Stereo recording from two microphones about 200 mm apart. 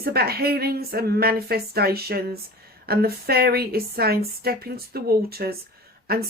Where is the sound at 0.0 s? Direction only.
50° right (ahead or behind).